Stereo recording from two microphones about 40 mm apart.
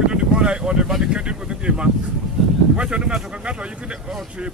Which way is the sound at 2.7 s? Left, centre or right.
Right.